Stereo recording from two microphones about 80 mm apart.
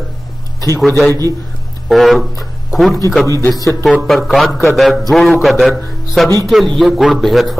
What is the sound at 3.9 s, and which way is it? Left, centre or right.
A man's voice, centre.